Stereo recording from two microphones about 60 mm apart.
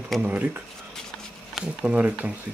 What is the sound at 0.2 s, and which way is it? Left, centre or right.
Speech, right.